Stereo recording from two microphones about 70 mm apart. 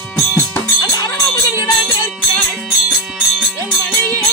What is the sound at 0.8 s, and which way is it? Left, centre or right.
Music, left.